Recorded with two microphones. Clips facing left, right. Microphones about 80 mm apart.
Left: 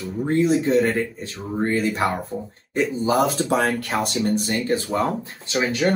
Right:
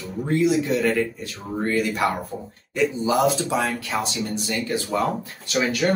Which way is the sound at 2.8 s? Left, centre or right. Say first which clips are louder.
Left 1 dB; left.